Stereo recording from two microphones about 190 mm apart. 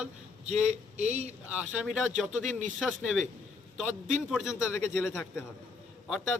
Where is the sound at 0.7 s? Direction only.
35° right (ahead or behind).